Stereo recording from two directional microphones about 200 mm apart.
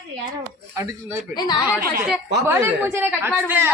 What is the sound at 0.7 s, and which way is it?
Speech, 15° right (ahead or behind).